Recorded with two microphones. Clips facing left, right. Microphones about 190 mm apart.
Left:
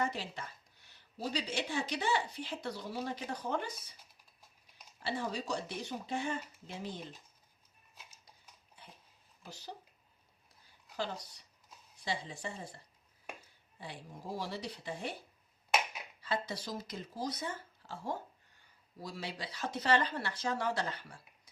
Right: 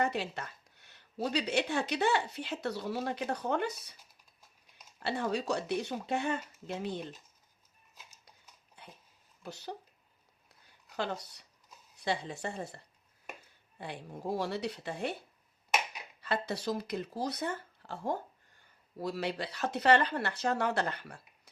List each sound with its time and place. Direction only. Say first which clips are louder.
0.0 s speech: right 4 dB; 65° right (ahead or behind)
4.9 s speech: right 4 dB; 60° right (ahead or behind)
9.4 s speech: right 6 dB; 65° right (ahead or behind)
10.9 s speech: right 3 dB; 65° right (ahead or behind)
16.2 s speech: right 4 dB; 60° right (ahead or behind)